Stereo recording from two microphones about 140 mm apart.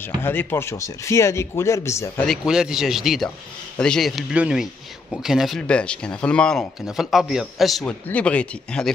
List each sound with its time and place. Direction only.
0.2 s speech: 15° left (ahead or behind)
2.2 s speech: centre (ahead or behind)